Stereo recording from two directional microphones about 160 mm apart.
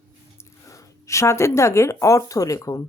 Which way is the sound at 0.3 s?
15° left (ahead or behind).